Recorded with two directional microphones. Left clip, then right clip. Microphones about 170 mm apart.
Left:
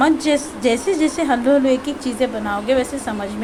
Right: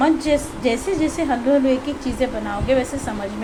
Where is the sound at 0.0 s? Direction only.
20° left (ahead or behind).